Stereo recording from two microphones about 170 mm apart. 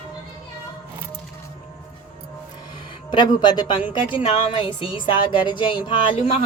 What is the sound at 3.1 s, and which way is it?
A woman's voice, 25° left (ahead or behind).